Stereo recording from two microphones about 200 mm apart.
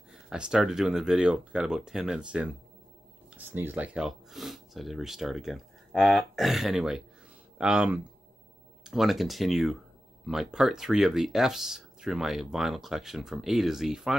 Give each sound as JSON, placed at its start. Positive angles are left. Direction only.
{"t": 0.1, "sound": "speech", "side_deg": -5}